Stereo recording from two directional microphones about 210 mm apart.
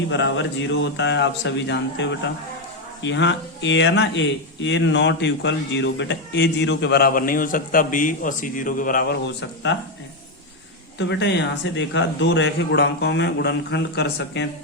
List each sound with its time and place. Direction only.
0.1 s speech: 60° left (ahead or behind)
10.9 s speech: 55° left (ahead or behind)